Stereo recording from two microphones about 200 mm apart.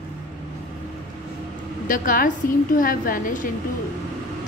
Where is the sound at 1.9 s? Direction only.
45° left (ahead or behind).